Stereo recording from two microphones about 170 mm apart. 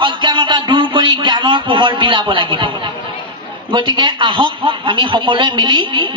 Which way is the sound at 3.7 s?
30° right (ahead or behind).